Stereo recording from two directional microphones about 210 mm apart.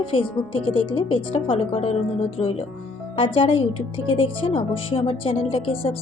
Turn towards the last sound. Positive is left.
turn(degrees=25)  # may be behind; listen again after turning